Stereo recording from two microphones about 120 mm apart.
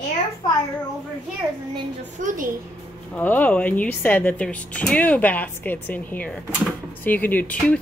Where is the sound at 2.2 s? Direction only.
90° right.